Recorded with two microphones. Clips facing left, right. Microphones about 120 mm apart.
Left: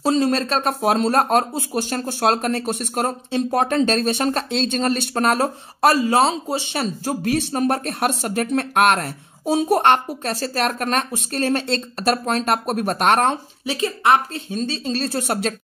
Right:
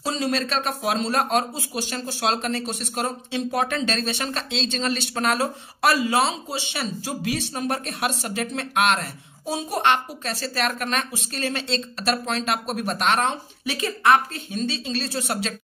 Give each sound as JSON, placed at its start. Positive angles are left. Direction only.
{"t": 0.0, "sound": "speech", "side_deg": 45}
{"t": 13.7, "sound": "speech", "side_deg": 25}